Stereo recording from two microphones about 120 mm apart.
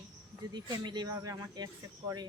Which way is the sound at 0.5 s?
35° right (ahead or behind).